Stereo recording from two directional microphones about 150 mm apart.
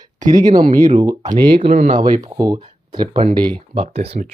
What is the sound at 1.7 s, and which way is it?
Speech, 65° right (ahead or behind).